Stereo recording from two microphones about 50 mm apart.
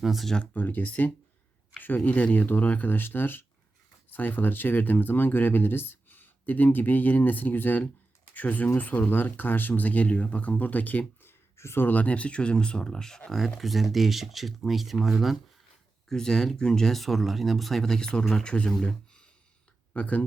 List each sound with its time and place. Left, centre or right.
0.0 s speech: centre
0.5 s speech: left
2.3 s speech: left
11.5 s speech: left
11.9 s speech: left; by 13.2 s centre
13.3 s speech: centre
16.0 s speech: centre
18.8 s a sound: centre
19.9 s speech: left